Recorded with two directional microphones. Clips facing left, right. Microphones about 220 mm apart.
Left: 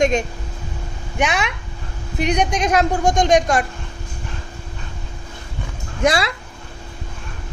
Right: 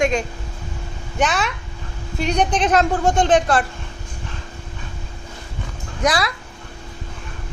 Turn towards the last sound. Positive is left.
turn(degrees=25)  # may be behind; listen again after turning